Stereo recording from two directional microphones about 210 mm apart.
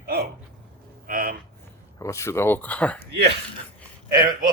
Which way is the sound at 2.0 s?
15° left (ahead or behind).